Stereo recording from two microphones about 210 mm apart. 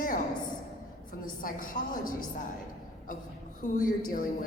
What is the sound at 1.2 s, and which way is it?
Speech, 40° left (ahead or behind).